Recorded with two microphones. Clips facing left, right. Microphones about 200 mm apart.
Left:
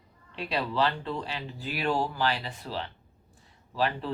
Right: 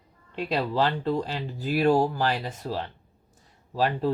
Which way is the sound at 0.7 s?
45° right (ahead or behind).